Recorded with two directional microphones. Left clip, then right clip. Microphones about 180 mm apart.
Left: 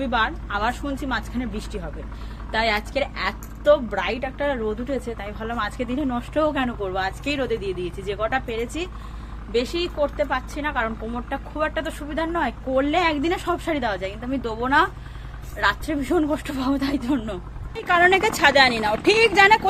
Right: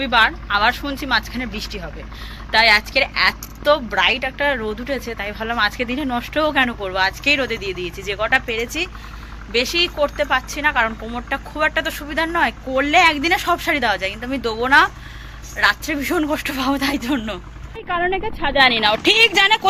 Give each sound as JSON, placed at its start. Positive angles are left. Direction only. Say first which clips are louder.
{"t": 0.0, "sound": "a woman's voice", "louder": "right 7 dB", "side_deg": -5}